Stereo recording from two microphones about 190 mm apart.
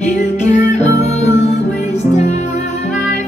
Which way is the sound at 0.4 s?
35° left (ahead or behind).